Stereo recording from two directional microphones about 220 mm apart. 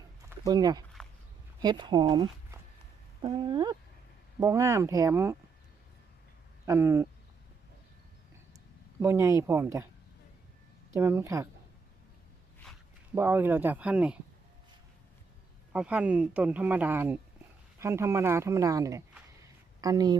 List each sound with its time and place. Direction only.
0.3 s speech: 15° right (ahead or behind)
3.2 s a sound: 20° right (ahead or behind)
4.4 s speech: 15° right (ahead or behind)
6.7 s speech: 10° right (ahead or behind)
8.5 s speech: 15° right (ahead or behind)
10.9 s speech: 10° right (ahead or behind)
13.1 s speech: 10° right (ahead or behind)
15.7 s speech: 5° right (ahead or behind)